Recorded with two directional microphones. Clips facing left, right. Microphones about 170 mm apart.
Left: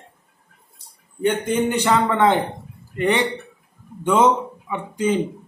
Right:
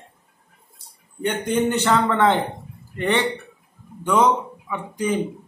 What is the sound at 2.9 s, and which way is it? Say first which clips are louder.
Speech: left 2 dB; 15° left (ahead or behind).